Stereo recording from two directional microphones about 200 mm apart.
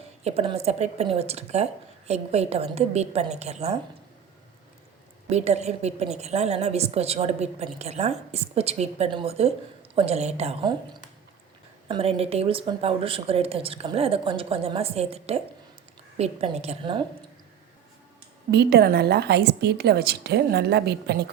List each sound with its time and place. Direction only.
0.3 s a woman's voice: 30° right (ahead or behind)
5.3 s a woman's voice: 35° right (ahead or behind)
11.9 s a woman's voice: 30° right (ahead or behind)
18.5 s a woman's voice: 55° right (ahead or behind)